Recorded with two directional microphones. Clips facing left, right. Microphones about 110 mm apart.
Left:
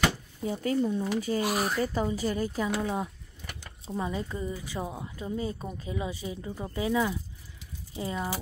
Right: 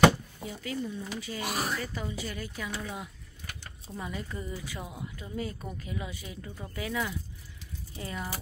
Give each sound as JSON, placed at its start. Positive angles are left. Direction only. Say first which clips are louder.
{"t": 0.5, "sound": "speech", "louder": "left 9 dB", "side_deg": 35}
{"t": 0.8, "sound": "a woman's voice", "louder": "left 8 dB", "side_deg": 50}